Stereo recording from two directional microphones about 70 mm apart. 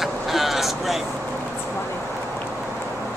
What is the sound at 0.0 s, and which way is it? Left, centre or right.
Vehicle, centre.